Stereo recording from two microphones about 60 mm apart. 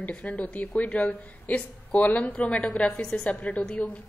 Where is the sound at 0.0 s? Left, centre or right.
Left.